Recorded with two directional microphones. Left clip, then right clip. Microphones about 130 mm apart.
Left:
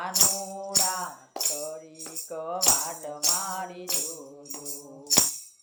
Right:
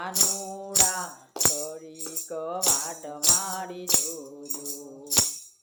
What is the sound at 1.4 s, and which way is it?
Music, 35° right (ahead or behind).